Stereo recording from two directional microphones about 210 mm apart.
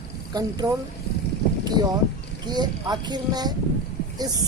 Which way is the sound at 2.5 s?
20° right (ahead or behind).